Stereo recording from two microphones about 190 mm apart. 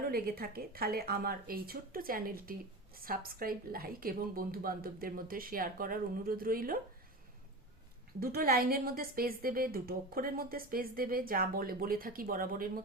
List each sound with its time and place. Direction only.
0.0 s speech: 50° right (ahead or behind)
8.2 s speech: 50° right (ahead or behind)